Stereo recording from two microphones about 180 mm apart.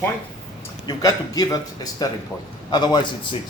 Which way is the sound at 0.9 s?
20° left (ahead or behind).